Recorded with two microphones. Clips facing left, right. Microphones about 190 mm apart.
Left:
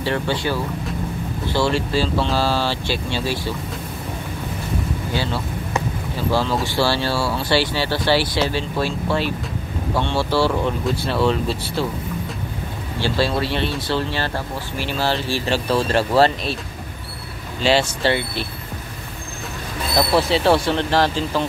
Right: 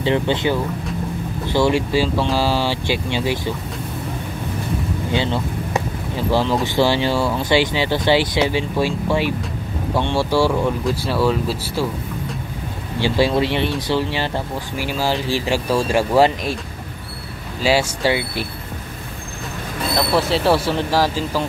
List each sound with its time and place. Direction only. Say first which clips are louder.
0.0 s speech: right 4 dB; 20° right (ahead or behind)
5.1 s speech: right 4 dB; 20° right (ahead or behind)
13.0 s speech: right 4 dB; 15° right (ahead or behind)
17.6 s speech: even; 10° right (ahead or behind)
20.2 s speech: even; 5° right (ahead or behind)